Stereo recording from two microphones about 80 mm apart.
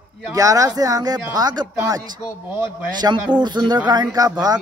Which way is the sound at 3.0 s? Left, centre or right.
Right.